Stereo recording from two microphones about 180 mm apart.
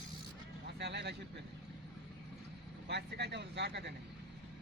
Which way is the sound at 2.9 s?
70° right (ahead or behind).